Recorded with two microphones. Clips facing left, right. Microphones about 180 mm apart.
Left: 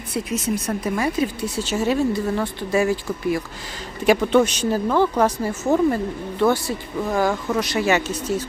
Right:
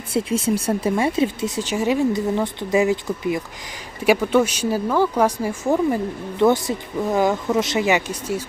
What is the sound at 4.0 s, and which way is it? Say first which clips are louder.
Speech: left 1 dB; 10° right (ahead or behind).